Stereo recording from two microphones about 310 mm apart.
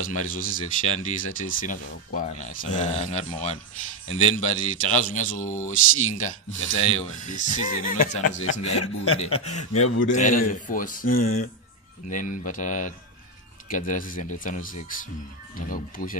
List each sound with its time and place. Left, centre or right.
0.0 s speech: left
8.2 s speech: left
10.0 s speech: left